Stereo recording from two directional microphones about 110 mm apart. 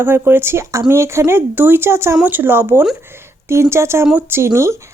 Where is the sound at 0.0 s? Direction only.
20° right (ahead or behind).